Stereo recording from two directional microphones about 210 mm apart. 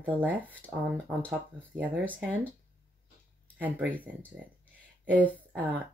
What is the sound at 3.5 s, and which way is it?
Speech, 10° right (ahead or behind).